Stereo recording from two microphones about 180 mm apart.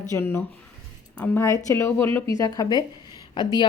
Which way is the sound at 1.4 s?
20° left (ahead or behind).